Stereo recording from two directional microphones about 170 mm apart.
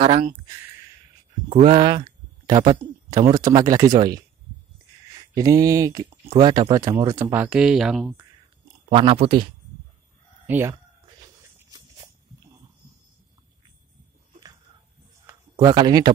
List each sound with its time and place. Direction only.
0.0 s speech: 40° right (ahead or behind)
1.5 s speech: 40° right (ahead or behind)
1.8 s speech: 25° right (ahead or behind)
5.3 s speech: 20° right (ahead or behind)
7.4 s speech: 5° right (ahead or behind)
8.8 s speech: 35° right (ahead or behind)
10.4 s speech: 15° right (ahead or behind)
15.2 s a sound: 25° right (ahead or behind)